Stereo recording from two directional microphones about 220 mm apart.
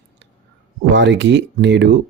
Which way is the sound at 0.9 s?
55° right (ahead or behind).